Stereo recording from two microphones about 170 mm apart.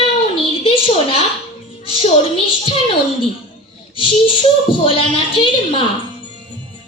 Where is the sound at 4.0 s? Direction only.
30° left (ahead or behind).